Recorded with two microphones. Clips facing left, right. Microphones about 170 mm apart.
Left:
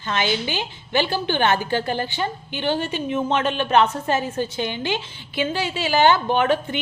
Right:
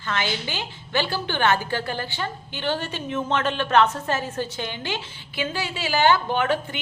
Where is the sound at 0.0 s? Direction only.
20° left (ahead or behind).